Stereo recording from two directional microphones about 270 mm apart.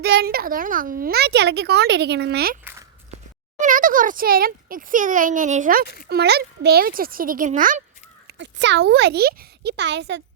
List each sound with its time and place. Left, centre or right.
0.0 s a child's voice: right
3.6 s a child's voice: right
8.3 s a child's voice: right